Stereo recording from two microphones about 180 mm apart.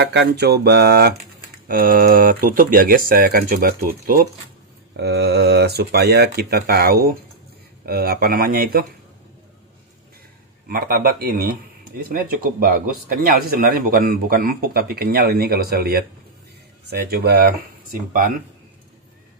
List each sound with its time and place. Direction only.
0.0 s speech: 65° right (ahead or behind)
4.9 s speech: 65° right (ahead or behind)
10.7 s speech: 55° right (ahead or behind)